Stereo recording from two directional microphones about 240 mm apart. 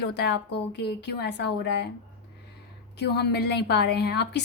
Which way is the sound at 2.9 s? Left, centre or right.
Left.